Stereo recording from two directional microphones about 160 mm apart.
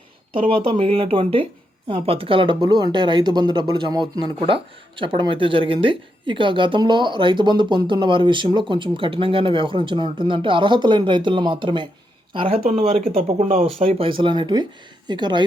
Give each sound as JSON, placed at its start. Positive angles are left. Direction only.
{"t": 0.3, "sound": "speech", "side_deg": -35}